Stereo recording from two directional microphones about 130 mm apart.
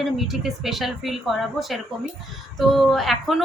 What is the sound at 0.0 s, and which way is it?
A woman's voice, centre (ahead or behind).